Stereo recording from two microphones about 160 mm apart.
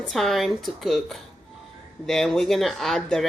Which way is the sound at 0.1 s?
Centre (ahead or behind).